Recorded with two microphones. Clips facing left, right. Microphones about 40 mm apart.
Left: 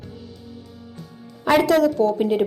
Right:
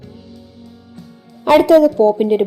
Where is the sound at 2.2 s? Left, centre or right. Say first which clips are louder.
Right 5 dB; centre.